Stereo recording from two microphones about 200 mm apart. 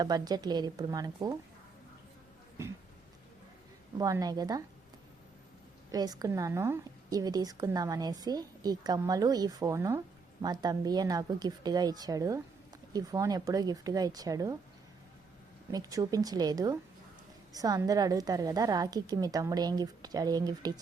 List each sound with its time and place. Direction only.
0.0 s a woman's voice: 20° right (ahead or behind)
3.9 s a woman's voice: 20° right (ahead or behind)
5.9 s a woman's voice: 20° right (ahead or behind)
15.7 s a woman's voice: 15° right (ahead or behind)